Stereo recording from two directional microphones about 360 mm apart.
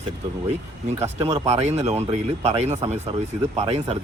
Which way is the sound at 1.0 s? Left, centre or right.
Centre.